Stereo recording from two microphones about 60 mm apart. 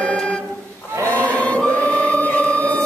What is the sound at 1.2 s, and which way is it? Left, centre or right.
Choir, left.